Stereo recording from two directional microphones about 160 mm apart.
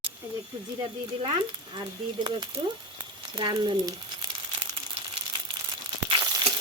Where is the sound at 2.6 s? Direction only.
20° right (ahead or behind).